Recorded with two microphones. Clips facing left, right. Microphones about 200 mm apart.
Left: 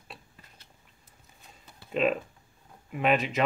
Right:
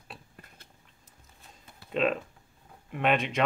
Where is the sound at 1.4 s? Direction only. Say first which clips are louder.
Even; 5° left (ahead or behind).